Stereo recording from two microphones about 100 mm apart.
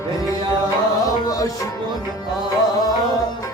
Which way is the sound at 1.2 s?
35° left (ahead or behind).